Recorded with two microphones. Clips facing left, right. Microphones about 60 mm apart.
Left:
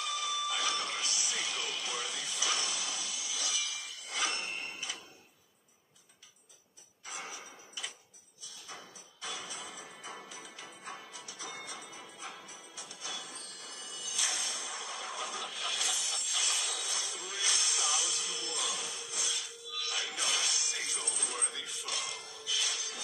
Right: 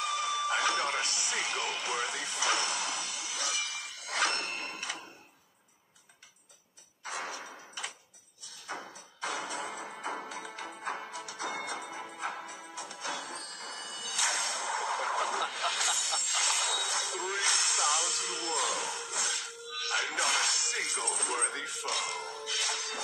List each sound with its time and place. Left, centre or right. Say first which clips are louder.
0.0 s music: right 4 dB; right
7.0 s a sound: right 6 dB; right
8.6 s music: right 9 dB; right